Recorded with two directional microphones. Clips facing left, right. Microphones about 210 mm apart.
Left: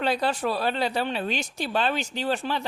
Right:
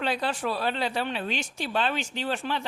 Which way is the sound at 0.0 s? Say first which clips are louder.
Left 3 dB; 40° left (ahead or behind).